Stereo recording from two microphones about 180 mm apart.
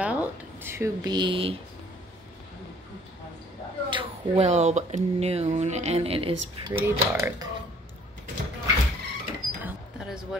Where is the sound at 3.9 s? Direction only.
30° right (ahead or behind).